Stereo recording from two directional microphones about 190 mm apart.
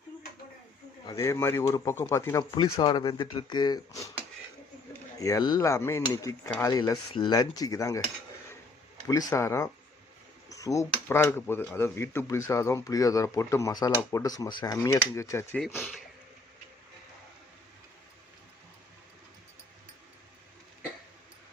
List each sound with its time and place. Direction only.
1.0 s speech: 15° left (ahead or behind)
5.1 s speech: 20° left (ahead or behind)
9.0 s speech: 20° left (ahead or behind)